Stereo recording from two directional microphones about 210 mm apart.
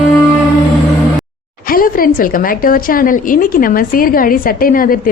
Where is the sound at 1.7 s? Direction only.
40° left (ahead or behind).